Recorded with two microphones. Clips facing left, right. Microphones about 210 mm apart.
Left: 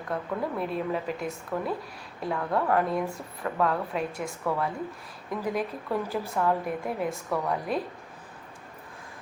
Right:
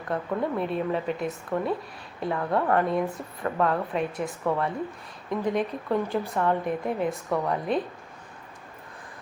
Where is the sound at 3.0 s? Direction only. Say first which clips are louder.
Right 3 dB; 20° right (ahead or behind).